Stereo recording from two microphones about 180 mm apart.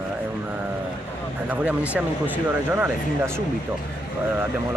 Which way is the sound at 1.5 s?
5° right (ahead or behind).